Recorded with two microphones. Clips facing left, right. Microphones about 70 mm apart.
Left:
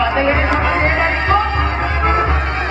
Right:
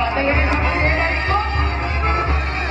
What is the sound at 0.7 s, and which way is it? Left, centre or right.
Music, left.